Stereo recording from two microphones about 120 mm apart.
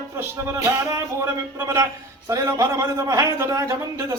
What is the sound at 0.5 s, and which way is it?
A man's voice, 20° right (ahead or behind).